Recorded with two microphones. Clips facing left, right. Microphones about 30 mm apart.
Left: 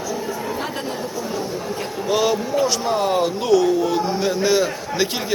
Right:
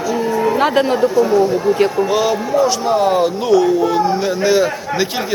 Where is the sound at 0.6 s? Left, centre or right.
Right.